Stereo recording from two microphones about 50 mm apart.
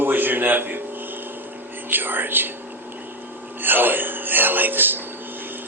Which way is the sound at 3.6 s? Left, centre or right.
Right.